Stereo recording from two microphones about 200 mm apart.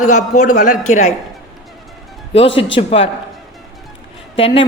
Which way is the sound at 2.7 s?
30° left (ahead or behind).